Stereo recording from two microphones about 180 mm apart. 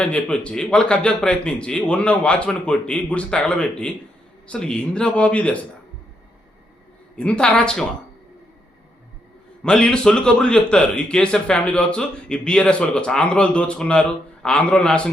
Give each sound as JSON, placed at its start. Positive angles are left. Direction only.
{"t": 0.0, "sound": "a man's voice", "side_deg": 5}
{"t": 7.2, "sound": "speech", "side_deg": 5}
{"t": 9.6, "sound": "speech", "side_deg": 5}